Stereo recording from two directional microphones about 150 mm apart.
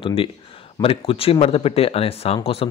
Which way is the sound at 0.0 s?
40° left (ahead or behind).